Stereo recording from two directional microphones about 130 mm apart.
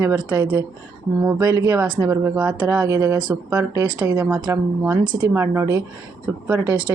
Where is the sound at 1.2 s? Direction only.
25° right (ahead or behind).